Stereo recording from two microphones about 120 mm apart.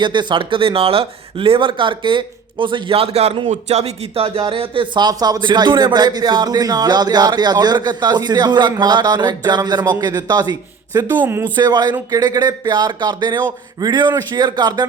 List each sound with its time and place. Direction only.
0.0 s speech: 40° right (ahead or behind)
11.2 s speech: 20° right (ahead or behind)
11.5 s speech: 35° right (ahead or behind)